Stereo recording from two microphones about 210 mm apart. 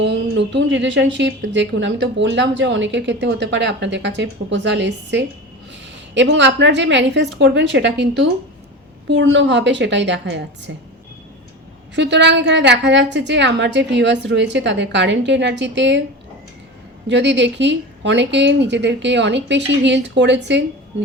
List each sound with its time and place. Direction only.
0.0 s speech: 55° right (ahead or behind)
11.9 s speech: 55° right (ahead or behind)
17.1 s speech: 55° right (ahead or behind)